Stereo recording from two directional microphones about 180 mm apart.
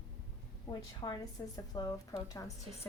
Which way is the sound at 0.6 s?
25° left (ahead or behind).